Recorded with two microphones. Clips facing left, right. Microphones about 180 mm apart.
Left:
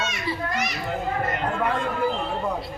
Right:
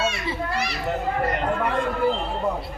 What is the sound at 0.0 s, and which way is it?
Children playing, 30° right (ahead or behind).